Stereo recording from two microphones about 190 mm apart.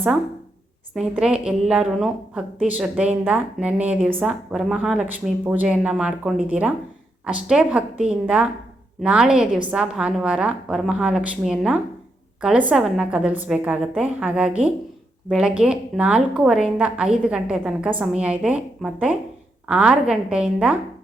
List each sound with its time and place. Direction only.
0.9 s a woman's voice: 5° right (ahead or behind)